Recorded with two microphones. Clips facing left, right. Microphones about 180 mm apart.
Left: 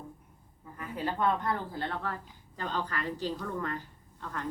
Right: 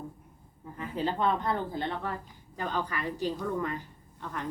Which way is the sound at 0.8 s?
25° right (ahead or behind).